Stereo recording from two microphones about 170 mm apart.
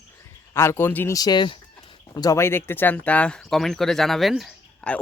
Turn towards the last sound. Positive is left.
turn(degrees=5)  # may be behind; listen again after turning